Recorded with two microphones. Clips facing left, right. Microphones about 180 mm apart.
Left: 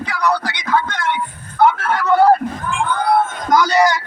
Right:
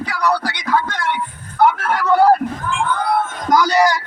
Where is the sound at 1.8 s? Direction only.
Centre (ahead or behind).